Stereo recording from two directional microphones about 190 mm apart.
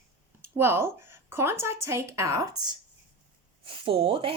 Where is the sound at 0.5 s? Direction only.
10° right (ahead or behind).